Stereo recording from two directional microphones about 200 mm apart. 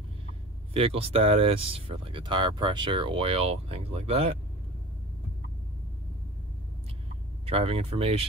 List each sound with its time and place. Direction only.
0.7 s speech: 30° right (ahead or behind)
7.4 s speech: 30° right (ahead or behind)